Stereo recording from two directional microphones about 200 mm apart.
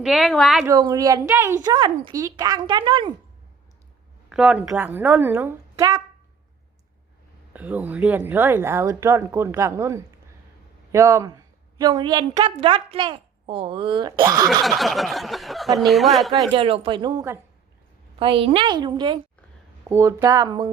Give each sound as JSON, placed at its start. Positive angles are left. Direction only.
{"t": 0.0, "sound": "speech", "side_deg": 0}
{"t": 0.6, "sound": "speech", "side_deg": -15}
{"t": 4.3, "sound": "speech", "side_deg": -5}
{"t": 7.5, "sound": "a woman's voice", "side_deg": -10}
{"t": 14.6, "sound": "snicker", "side_deg": 0}
{"t": 15.9, "sound": "speech", "side_deg": 0}
{"t": 16.6, "sound": "speech", "side_deg": -25}
{"t": 18.2, "sound": "speech", "side_deg": -25}